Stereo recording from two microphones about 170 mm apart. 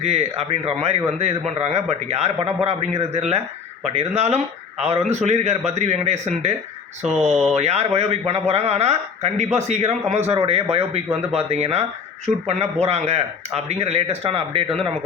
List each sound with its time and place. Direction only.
0.0 s speech: 40° right (ahead or behind)